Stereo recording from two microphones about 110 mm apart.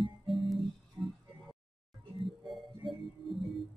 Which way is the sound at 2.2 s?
Centre (ahead or behind).